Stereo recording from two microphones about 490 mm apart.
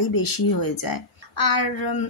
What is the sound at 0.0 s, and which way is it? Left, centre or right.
A woman's voice, left.